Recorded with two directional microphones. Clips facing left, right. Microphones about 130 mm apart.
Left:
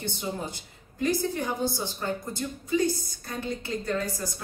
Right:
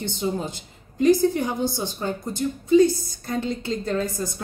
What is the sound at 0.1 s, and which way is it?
Speech, 20° right (ahead or behind).